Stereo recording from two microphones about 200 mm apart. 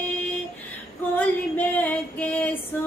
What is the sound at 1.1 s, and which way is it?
Female singing, 10° left (ahead or behind).